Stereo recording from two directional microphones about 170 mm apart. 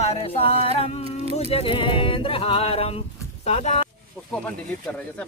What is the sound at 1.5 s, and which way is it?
Speech, 35° left (ahead or behind).